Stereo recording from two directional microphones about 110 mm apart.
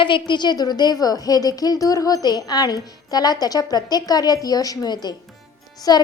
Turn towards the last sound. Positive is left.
turn(degrees=35)  # may be behind; listen again after turning